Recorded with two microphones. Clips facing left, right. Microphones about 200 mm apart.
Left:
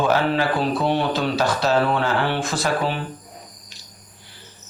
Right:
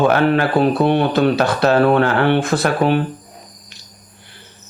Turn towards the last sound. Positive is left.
turn(degrees=-60)  # may be behind; listen again after turning